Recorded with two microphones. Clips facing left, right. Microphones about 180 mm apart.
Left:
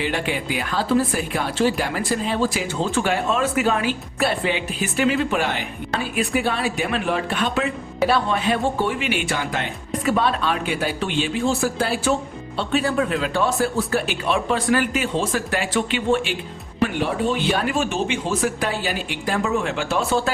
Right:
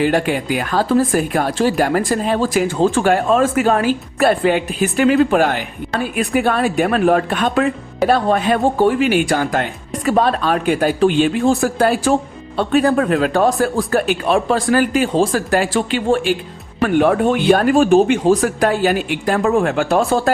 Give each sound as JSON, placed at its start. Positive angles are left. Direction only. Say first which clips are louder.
{"t": 0.0, "sound": "speech", "louder": "right 8 dB", "side_deg": -45}
{"t": 16.8, "sound": "speech", "louder": "right 8 dB", "side_deg": -55}